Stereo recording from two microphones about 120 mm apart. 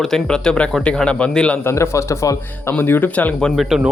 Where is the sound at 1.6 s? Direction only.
25° left (ahead or behind); by 3.8 s centre (ahead or behind).